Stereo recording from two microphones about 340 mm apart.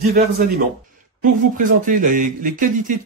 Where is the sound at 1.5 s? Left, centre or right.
Right.